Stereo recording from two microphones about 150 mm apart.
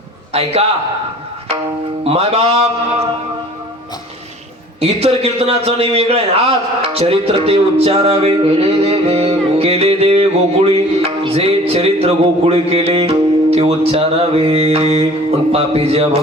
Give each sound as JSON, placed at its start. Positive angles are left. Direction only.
{"t": 0.3, "sound": "a man's voice", "side_deg": -45}
{"t": 2.0, "sound": "a man's voice", "side_deg": -40}
{"t": 4.8, "sound": "a man's voice", "side_deg": -40}